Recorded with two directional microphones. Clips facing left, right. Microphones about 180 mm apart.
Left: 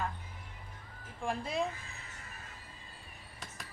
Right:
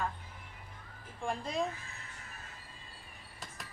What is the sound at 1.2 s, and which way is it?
Speech, 5° left (ahead or behind).